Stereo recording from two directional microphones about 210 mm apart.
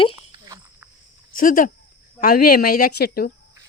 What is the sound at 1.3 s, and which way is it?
Speech, 40° left (ahead or behind).